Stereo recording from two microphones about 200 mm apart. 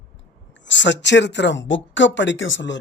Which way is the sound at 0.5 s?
65° left (ahead or behind).